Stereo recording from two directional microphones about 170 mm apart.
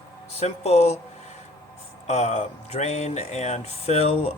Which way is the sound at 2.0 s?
40° left (ahead or behind).